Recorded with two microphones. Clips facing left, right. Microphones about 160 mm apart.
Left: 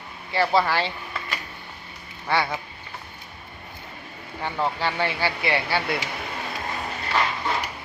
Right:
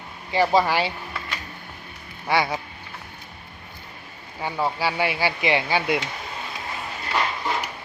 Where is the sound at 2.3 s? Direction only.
15° right (ahead or behind).